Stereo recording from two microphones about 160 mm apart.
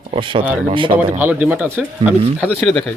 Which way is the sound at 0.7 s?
30° right (ahead or behind).